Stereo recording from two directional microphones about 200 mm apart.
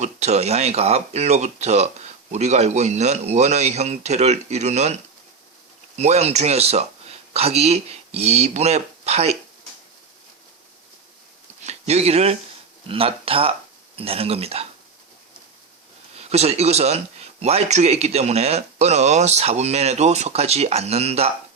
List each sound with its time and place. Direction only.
0.0 s speech: 35° right (ahead or behind)
6.0 s speech: 35° right (ahead or behind)
11.6 s speech: 35° right (ahead or behind)
16.1 s speech: 30° right (ahead or behind)